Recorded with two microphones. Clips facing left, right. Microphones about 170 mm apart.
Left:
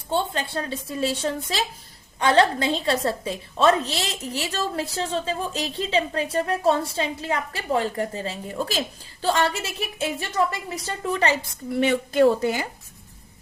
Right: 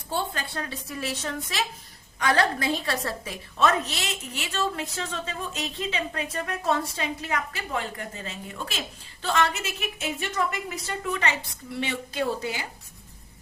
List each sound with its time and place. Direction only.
0.1 s a woman's voice: 30° left (ahead or behind)
11.7 s speech: 50° left (ahead or behind)